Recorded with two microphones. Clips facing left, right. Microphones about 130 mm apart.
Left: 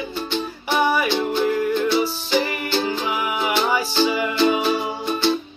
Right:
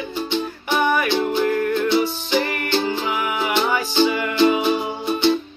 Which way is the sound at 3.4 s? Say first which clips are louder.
Left 1 dB; 5° left (ahead or behind).